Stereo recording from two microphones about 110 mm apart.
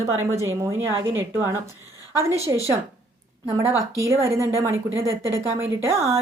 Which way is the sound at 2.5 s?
30° right (ahead or behind).